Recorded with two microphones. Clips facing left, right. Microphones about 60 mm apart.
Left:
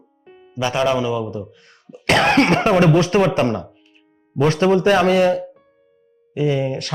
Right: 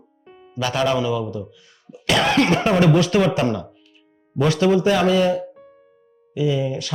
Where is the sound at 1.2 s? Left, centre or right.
Left.